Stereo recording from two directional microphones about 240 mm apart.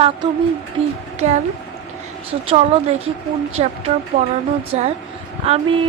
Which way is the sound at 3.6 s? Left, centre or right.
Right.